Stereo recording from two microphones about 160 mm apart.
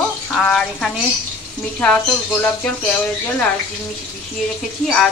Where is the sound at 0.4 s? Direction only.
5° left (ahead or behind).